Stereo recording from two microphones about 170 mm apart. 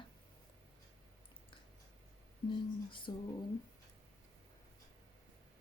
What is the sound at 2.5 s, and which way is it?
Speech, 30° left (ahead or behind).